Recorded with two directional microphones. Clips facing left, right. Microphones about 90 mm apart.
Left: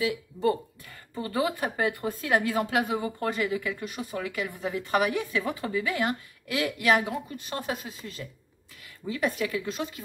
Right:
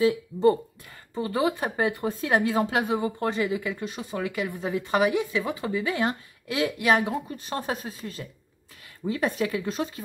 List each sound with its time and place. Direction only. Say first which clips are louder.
0.0 s a woman's voice: right 6 dB; 30° right (ahead or behind)